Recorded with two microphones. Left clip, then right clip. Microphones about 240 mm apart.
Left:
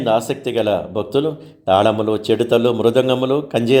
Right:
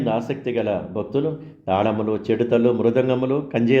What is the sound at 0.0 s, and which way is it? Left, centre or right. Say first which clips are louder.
Speech: left 6 dB; left.